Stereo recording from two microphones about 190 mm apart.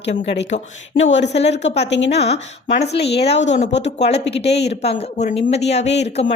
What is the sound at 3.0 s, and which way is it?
Speech, 60° left (ahead or behind).